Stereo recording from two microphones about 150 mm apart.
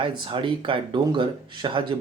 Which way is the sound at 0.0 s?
35° right (ahead or behind).